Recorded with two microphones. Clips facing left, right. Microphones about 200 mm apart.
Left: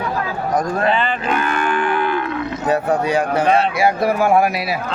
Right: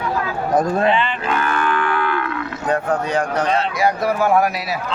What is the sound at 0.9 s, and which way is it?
Speech, 40° left (ahead or behind).